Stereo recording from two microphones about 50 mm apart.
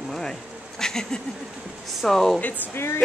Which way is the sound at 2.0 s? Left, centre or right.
Centre.